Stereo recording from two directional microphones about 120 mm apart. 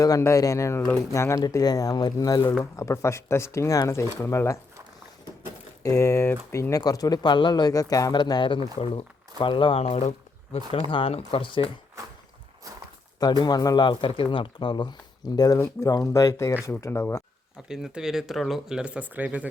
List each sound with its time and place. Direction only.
0.0 s speech: 25° left (ahead or behind)
5.8 s speech: 25° left (ahead or behind); by 9.8 s 45° left (ahead or behind)
9.8 s a sound: 65° left (ahead or behind)
10.8 s speech: 50° left (ahead or behind)
13.1 s speech: 35° left (ahead or behind)
15.5 s speech: 20° left (ahead or behind)
17.7 s speech: 5° right (ahead or behind)